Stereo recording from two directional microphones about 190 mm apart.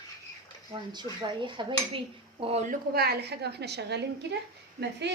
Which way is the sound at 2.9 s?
55° right (ahead or behind).